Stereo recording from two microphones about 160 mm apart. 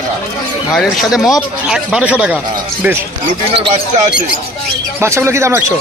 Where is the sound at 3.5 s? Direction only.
35° right (ahead or behind).